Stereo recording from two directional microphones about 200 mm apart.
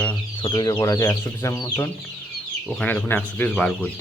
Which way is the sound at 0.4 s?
20° left (ahead or behind).